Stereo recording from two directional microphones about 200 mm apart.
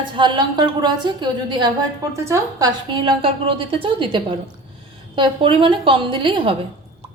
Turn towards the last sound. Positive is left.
turn(degrees=-25)  # may be behind; listen again after turning